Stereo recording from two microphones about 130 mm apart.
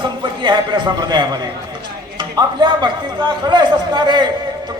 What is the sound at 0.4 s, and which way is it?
A man's voice, 35° right (ahead or behind).